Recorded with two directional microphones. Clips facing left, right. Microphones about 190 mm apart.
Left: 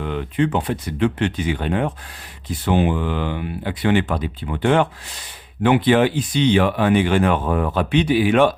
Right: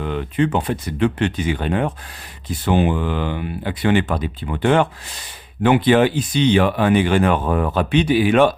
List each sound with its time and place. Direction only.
0.0 s speech: 40° right (ahead or behind)